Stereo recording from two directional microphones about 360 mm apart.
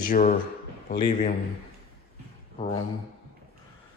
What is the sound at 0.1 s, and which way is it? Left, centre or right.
A man's voice, left.